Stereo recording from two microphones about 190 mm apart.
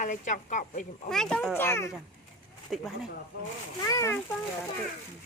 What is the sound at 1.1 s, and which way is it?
Speech, 5° left (ahead or behind).